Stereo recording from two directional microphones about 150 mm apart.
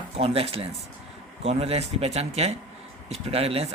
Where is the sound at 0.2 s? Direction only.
40° right (ahead or behind).